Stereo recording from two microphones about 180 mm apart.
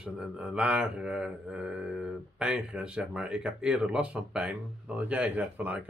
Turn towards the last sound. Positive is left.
turn(degrees=-10)  # may be behind; listen again after turning